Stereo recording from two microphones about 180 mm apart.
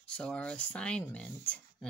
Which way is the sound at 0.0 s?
5° left (ahead or behind).